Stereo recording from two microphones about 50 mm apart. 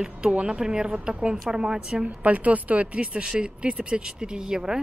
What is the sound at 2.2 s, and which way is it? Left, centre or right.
Speech, right.